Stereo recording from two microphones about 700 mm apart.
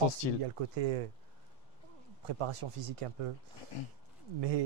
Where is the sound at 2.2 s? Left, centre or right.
Right.